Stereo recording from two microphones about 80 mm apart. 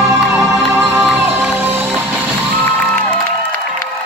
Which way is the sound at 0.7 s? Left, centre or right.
Right.